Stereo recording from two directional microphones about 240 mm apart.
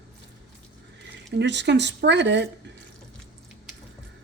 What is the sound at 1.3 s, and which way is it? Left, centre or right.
Speech, right.